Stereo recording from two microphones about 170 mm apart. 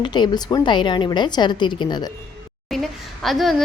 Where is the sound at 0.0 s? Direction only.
25° left (ahead or behind).